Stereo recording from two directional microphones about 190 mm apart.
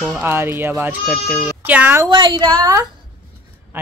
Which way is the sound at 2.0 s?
25° right (ahead or behind).